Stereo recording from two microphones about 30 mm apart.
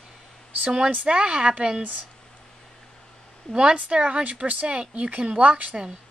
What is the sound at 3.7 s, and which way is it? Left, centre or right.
Speech, right.